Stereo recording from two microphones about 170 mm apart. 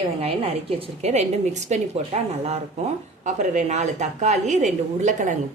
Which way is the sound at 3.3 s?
45° right (ahead or behind).